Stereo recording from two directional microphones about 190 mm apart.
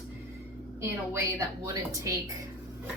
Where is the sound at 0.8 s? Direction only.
15° right (ahead or behind).